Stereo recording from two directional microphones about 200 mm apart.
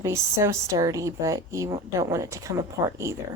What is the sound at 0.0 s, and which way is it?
A woman's voice, 15° right (ahead or behind).